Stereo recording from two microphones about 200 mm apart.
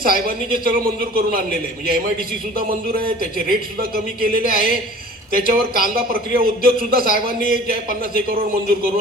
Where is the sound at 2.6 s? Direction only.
45° right (ahead or behind).